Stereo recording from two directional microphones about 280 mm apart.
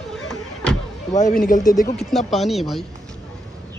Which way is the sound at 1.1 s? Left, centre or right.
Left.